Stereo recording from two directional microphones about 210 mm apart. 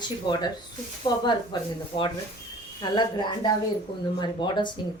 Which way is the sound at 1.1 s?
20° left (ahead or behind).